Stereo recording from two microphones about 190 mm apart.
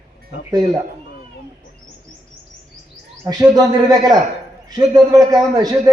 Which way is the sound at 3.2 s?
20° right (ahead or behind).